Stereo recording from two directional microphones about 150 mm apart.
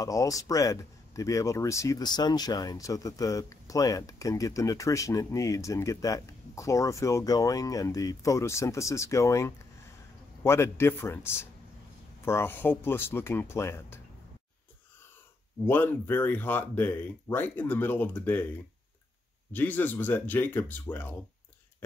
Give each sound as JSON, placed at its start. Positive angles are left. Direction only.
{"t": 0.0, "sound": "speech", "side_deg": 25}
{"t": 15.6, "sound": "speech", "side_deg": 15}
{"t": 19.5, "sound": "speech", "side_deg": 10}